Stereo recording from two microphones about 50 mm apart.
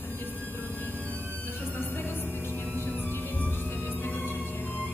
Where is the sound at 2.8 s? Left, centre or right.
Left.